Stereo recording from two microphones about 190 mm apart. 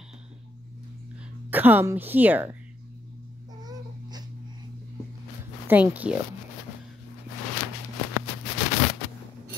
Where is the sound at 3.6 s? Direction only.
20° right (ahead or behind).